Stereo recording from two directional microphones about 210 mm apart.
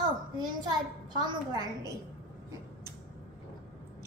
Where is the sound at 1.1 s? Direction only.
20° right (ahead or behind).